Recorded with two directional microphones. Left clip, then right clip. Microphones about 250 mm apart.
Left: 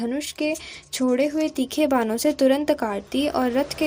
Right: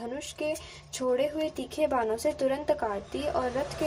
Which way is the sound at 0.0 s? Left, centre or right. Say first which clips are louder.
Left 7 dB; left.